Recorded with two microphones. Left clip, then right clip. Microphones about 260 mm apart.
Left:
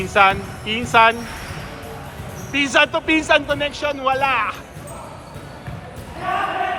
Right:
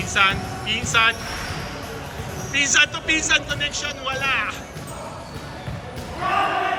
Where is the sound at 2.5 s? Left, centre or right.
Centre.